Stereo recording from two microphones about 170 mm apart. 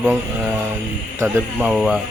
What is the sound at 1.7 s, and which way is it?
Speech, centre (ahead or behind).